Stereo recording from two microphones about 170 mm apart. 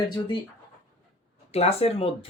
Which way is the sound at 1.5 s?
35° left (ahead or behind).